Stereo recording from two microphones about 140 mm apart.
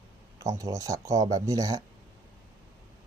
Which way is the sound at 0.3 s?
25° right (ahead or behind).